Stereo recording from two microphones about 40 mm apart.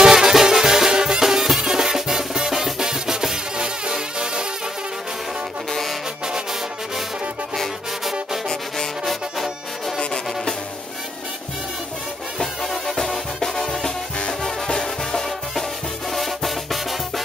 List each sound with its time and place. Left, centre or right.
0.0 s music: centre
5.7 s music: centre
8.0 s brass instrument: centre
9.0 s trombone: centre
9.9 s music: centre
12.6 s music: centre